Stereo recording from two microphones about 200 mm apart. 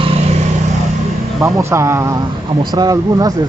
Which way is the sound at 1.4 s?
15° right (ahead or behind).